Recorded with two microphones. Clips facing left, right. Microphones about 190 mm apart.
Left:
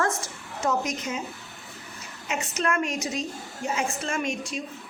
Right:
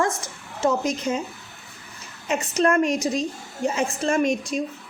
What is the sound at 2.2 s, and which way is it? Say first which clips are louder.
A woman's voice: right 7 dB; 35° right (ahead or behind).